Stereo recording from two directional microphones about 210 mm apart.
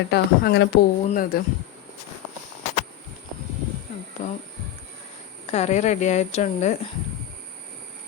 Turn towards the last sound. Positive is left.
turn(degrees=35)  # may be behind; listen again after turning